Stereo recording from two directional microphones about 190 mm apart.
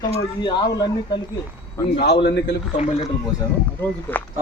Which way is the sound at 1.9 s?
60° left (ahead or behind).